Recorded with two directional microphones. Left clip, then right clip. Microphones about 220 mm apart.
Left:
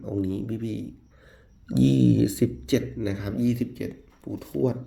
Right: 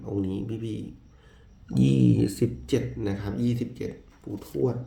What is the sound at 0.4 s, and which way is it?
Speech, 25° left (ahead or behind).